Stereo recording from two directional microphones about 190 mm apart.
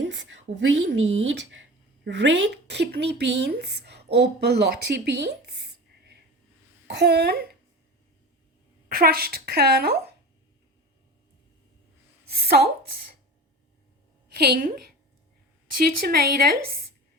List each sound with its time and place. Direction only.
0.0 s a woman's voice: 75° right (ahead or behind); by 5.3 s 55° right (ahead or behind)
6.8 s speech: 65° right (ahead or behind)
8.9 s speech: 50° right (ahead or behind)
12.5 s speech: 55° right (ahead or behind)
14.3 s speech: 55° right (ahead or behind)
15.8 s speech: 55° right (ahead or behind)